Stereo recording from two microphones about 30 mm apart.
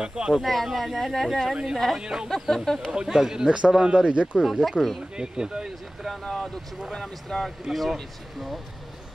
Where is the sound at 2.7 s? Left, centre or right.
Centre.